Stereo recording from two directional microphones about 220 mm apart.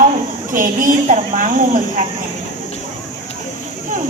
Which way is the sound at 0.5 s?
40° right (ahead or behind).